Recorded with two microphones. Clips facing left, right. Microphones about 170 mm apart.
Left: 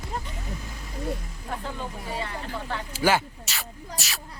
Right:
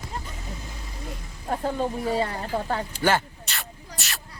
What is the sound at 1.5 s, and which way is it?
Speech, 40° right (ahead or behind).